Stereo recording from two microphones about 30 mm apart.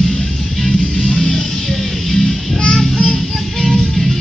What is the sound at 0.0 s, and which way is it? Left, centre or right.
Music, centre.